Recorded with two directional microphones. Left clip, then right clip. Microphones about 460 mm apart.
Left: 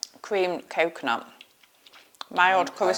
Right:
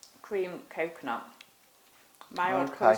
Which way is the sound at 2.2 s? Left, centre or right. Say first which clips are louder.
Left 8 dB; left.